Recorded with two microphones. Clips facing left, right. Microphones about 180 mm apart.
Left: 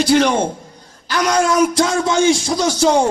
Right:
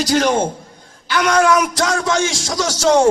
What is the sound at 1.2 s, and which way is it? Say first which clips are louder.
Speech: even; 30° left (ahead or behind).